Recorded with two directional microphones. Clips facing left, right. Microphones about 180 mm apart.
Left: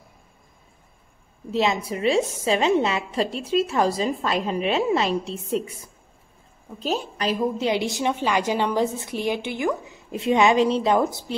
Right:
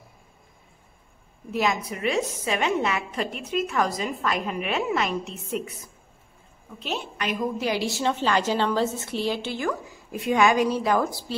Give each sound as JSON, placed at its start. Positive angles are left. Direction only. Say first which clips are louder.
{"t": 1.5, "sound": "a woman's voice", "louder": "left 3 dB", "side_deg": 25}
{"t": 7.5, "sound": "a woman's voice", "louder": "left 3 dB", "side_deg": 20}